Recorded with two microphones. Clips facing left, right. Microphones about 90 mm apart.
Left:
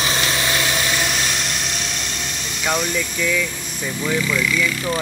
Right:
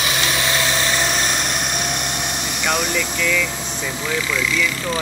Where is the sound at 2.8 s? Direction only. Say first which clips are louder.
Right 1 dB; 85° right.